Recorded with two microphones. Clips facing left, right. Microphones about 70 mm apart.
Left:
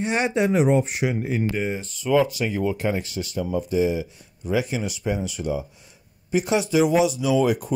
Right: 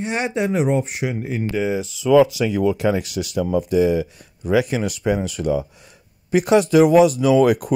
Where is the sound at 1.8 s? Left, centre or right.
Right.